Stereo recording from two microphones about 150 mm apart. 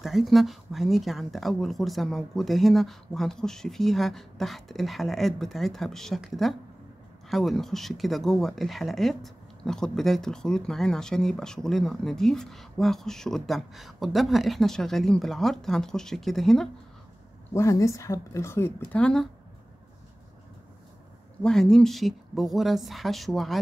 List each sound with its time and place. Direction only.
0.0 s speech: centre (ahead or behind)
17.6 s speech: 20° left (ahead or behind)
21.4 s speech: 5° left (ahead or behind)